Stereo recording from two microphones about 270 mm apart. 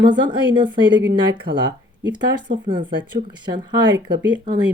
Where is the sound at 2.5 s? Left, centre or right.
Centre.